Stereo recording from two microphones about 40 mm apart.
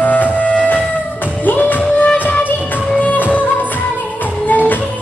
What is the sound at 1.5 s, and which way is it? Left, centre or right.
Music, left.